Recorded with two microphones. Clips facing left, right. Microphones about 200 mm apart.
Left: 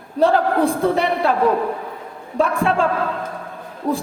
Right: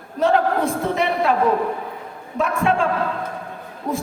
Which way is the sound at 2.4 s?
35° left (ahead or behind).